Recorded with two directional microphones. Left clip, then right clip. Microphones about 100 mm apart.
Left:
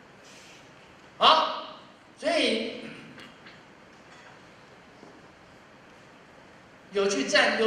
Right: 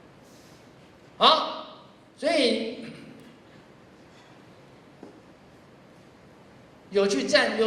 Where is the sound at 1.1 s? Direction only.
35° left (ahead or behind).